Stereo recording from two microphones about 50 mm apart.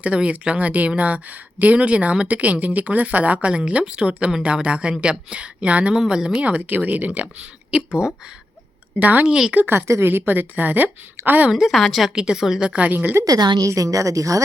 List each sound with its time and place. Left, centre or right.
0.0 s speech: right
5.9 s a woman's voice: centre
6.4 s a woman's voice: right
7.7 s speech: right
9.0 s a woman's voice: right
9.2 s a woman's voice: centre
9.6 s a woman's voice: right
11.7 s a woman's voice: centre
12.1 s a woman's voice: centre
12.9 s a woman's voice: right
13.7 s speech: right